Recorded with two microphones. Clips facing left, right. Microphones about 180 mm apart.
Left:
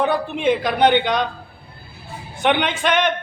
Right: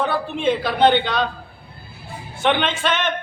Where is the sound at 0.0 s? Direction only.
15° left (ahead or behind).